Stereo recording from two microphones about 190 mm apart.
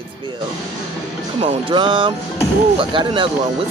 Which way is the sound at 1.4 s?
25° right (ahead or behind).